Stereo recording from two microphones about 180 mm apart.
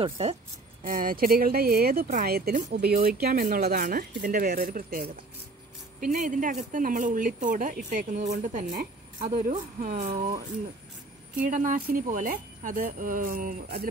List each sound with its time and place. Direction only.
0.0 s speech: 35° right (ahead or behind)
0.8 s speech: 50° right (ahead or behind)
6.1 s speech: 50° right (ahead or behind)
11.4 s speech: 50° right (ahead or behind)